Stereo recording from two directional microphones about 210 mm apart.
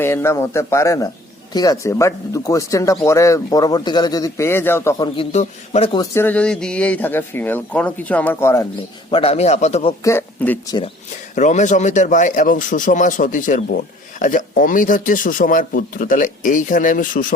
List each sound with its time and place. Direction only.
0.0 s speech: 10° left (ahead or behind)
6.1 s speech: 10° left (ahead or behind)
9.0 s speech: 25° left (ahead or behind)
10.0 s speech: 10° left (ahead or behind)
11.3 s speech: 35° left (ahead or behind)